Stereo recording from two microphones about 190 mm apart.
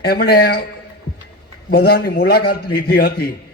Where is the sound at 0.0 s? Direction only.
55° left (ahead or behind).